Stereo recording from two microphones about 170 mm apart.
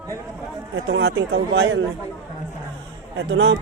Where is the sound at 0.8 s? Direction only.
85° right.